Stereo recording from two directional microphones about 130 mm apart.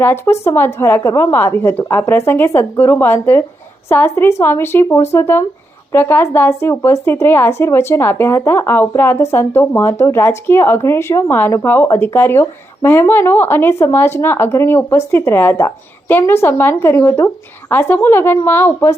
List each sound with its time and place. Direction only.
0.0 s speech: 20° left (ahead or behind)